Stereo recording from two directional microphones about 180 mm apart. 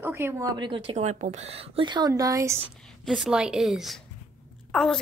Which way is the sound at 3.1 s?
Centre (ahead or behind).